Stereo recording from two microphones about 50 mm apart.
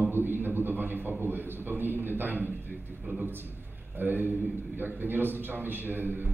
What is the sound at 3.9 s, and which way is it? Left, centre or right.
A man's voice, right.